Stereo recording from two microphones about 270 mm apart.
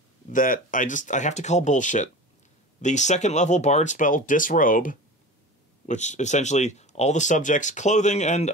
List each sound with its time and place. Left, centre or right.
0.3 s speech: left